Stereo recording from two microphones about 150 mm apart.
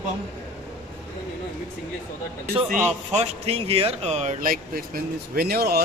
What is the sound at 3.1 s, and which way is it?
Speech, 40° right (ahead or behind).